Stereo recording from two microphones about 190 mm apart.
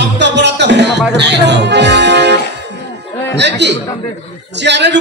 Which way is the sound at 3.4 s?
65° right (ahead or behind).